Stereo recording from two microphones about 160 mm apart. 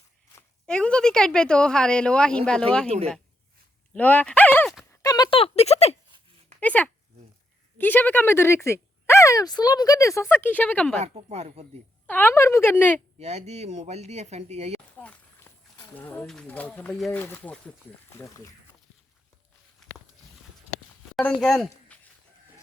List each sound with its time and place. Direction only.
0.7 s a woman's voice: 5° left (ahead or behind)
2.8 s speech: 40° right (ahead or behind)
3.9 s a sound: 10° left (ahead or behind)
5.0 s a sound: 25° left (ahead or behind); by 6.0 s 40° left (ahead or behind)
6.6 s speech: 10° left (ahead or behind)
11.0 s speech: 40° right (ahead or behind)
12.0 s speech: 10° left (ahead or behind)
13.1 s speech: 40° right (ahead or behind)
14.9 s a sound: 10° left (ahead or behind)
16.0 s speech: 10° left (ahead or behind)
21.2 s speech: 5° left (ahead or behind)